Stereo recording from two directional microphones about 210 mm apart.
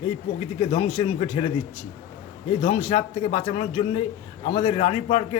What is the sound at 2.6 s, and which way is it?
A man's voice, 30° left (ahead or behind).